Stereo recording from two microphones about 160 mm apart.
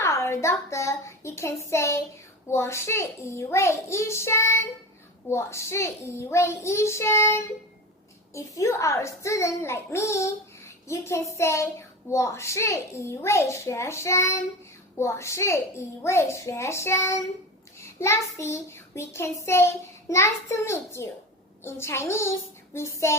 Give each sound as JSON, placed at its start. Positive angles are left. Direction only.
{"t": 0.0, "sound": "a child's voice", "side_deg": 15}